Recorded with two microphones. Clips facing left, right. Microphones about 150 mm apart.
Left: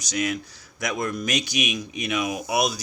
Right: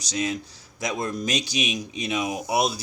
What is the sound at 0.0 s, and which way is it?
Speech, 30° right (ahead or behind).